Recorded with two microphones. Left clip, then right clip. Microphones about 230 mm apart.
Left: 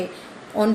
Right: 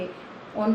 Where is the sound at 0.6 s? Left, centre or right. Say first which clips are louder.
Left 6 dB; left.